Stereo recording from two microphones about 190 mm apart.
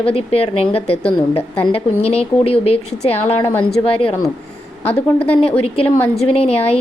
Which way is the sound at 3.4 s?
15° left (ahead or behind).